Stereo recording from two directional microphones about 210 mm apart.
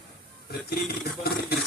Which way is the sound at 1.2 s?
50° left (ahead or behind).